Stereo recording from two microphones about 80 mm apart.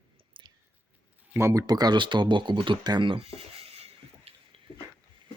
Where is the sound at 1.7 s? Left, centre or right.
Right.